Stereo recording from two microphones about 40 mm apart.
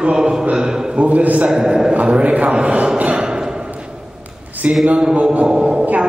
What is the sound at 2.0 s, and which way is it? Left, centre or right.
Speech, right.